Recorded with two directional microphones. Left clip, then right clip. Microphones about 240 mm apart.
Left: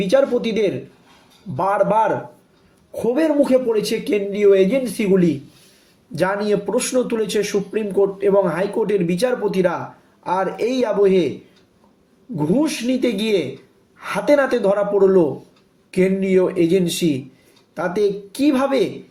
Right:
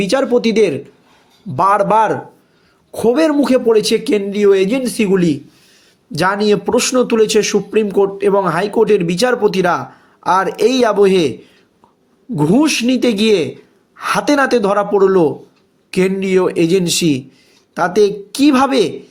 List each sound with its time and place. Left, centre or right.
0.0 s a man's voice: right
12.4 s a man's voice: right